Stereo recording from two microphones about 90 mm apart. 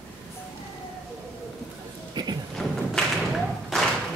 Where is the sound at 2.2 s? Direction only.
55° right (ahead or behind).